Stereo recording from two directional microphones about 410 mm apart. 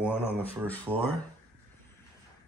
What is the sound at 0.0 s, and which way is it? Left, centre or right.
Speech, centre.